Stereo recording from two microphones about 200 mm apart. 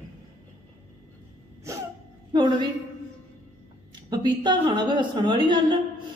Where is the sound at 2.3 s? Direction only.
25° right (ahead or behind).